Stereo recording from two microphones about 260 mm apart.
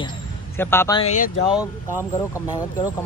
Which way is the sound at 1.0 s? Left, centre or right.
Left.